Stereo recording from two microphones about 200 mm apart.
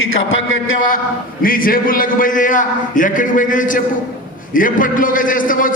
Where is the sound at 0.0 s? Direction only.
90° left.